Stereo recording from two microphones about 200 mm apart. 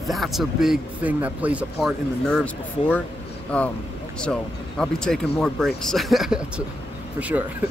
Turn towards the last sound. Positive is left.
turn(degrees=-5)  # may be behind; listen again after turning